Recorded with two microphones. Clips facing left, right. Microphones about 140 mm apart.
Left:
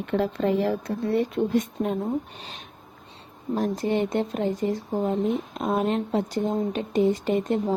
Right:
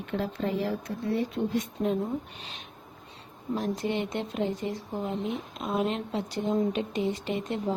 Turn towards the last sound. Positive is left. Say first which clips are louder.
# left 6 dB
turn(degrees=45)  # may be behind; listen again after turning